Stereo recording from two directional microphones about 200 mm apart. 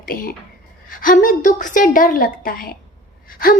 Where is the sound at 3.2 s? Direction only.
45° left (ahead or behind).